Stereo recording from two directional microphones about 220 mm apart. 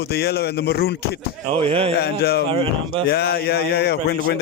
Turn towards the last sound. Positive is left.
turn(degrees=45)  # may be behind; listen again after turning